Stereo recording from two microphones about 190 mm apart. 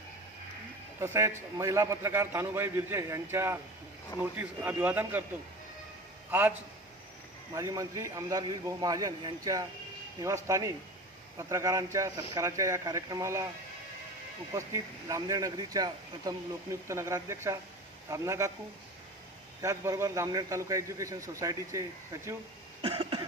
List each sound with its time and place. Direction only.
0.9 s a man's voice: 15° right (ahead or behind)
7.5 s a man's voice: 15° right (ahead or behind)
14.5 s a man's voice: 15° right (ahead or behind)
19.6 s a man's voice: 15° right (ahead or behind)
22.8 s cough: 25° right (ahead or behind)